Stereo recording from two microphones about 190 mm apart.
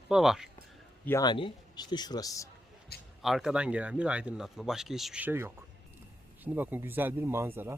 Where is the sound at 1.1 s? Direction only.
20° left (ahead or behind).